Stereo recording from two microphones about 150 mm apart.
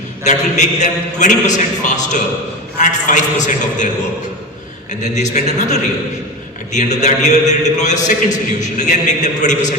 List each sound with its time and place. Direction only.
0.3 s a man's voice: 50° left (ahead or behind)
5.0 s a man's voice: 50° left (ahead or behind)